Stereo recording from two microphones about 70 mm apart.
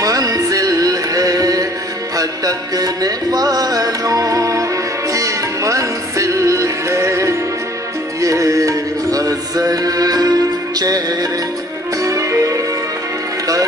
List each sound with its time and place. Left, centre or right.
0.0 s music: right
12.0 s music: right